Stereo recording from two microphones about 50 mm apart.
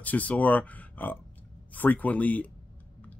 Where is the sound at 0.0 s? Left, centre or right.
Left.